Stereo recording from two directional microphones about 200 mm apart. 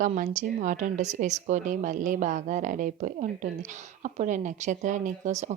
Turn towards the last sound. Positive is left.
turn(degrees=-35)  # may be behind; listen again after turning